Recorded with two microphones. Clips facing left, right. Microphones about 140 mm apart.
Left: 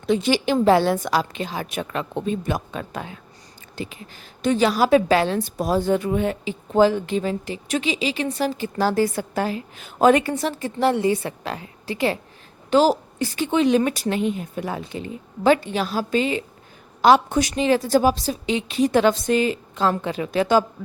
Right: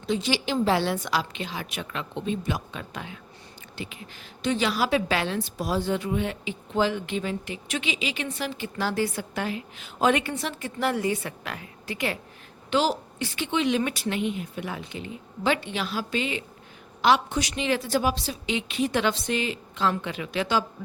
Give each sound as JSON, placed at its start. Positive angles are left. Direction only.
{"t": 0.1, "sound": "a woman's voice", "side_deg": 55}
{"t": 12.7, "sound": "a woman's voice", "side_deg": 40}